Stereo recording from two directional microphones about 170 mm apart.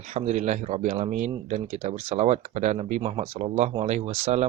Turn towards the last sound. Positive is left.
turn(degrees=-40)  # may be behind; listen again after turning